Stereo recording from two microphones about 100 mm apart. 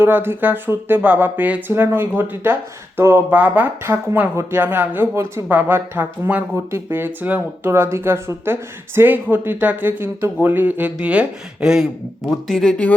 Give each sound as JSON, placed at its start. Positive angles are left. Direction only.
{"t": 0.0, "sound": "speech", "side_deg": -20}
{"t": 12.5, "sound": "speech", "side_deg": 5}